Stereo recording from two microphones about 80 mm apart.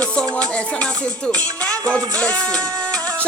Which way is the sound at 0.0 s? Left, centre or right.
Centre.